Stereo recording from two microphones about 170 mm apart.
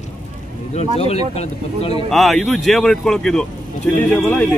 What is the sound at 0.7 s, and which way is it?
Speech, 35° left (ahead or behind).